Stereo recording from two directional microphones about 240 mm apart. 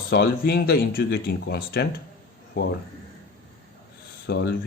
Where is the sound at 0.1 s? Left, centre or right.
Left.